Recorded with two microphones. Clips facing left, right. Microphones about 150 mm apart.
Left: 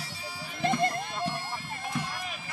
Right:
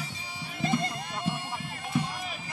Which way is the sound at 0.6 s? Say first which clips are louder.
Left 2 dB; 65° left (ahead or behind).